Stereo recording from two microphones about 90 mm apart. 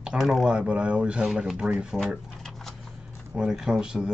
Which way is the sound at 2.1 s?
Centre (ahead or behind).